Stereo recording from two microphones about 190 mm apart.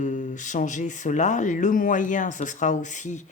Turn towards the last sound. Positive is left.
turn(degrees=40)  # may be behind; listen again after turning